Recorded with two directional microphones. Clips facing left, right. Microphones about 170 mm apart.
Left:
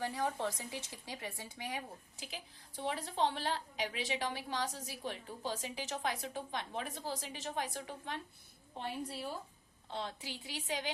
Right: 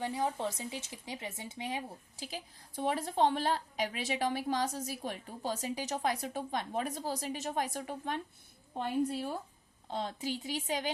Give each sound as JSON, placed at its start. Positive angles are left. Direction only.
{"t": 0.0, "sound": "speech", "side_deg": -20}
{"t": 2.2, "sound": "a woman's voice", "side_deg": -45}